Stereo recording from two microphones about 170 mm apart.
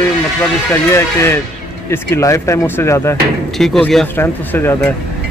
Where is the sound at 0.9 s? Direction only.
15° left (ahead or behind).